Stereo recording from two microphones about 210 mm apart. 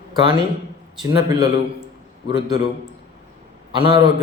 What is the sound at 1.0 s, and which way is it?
Speech, 20° right (ahead or behind).